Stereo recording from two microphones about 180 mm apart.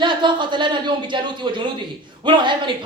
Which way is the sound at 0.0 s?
25° right (ahead or behind).